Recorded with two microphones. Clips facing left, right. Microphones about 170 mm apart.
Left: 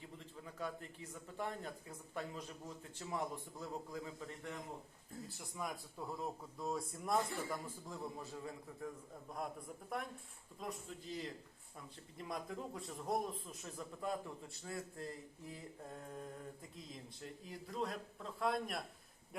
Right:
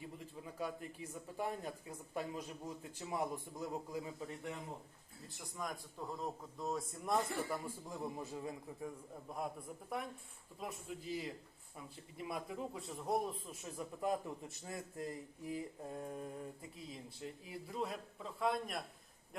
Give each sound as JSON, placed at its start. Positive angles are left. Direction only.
{"t": 0.4, "sound": "a sound", "side_deg": -10}
{"t": 1.4, "sound": "a man's voice", "side_deg": -10}
{"t": 5.5, "sound": "a man's voice", "side_deg": 5}
{"t": 7.9, "sound": "a man's voice", "side_deg": -15}
{"t": 10.6, "sound": "a man's voice", "side_deg": -5}
{"t": 14.0, "sound": "a man's voice", "side_deg": -20}
{"t": 17.4, "sound": "a man's voice", "side_deg": -5}